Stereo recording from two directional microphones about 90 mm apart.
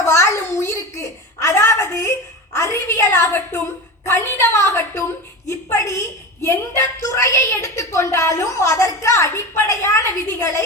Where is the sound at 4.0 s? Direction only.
30° left (ahead or behind).